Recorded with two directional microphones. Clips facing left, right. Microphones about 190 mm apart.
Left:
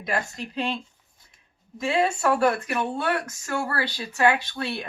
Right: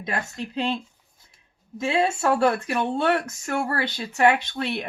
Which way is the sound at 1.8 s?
25° right (ahead or behind).